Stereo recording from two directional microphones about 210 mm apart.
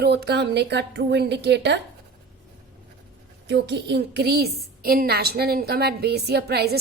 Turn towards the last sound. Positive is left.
turn(degrees=-50)  # may be behind; listen again after turning